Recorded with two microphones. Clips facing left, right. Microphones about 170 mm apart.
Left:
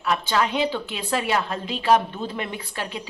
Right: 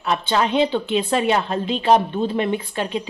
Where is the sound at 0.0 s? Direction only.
25° right (ahead or behind).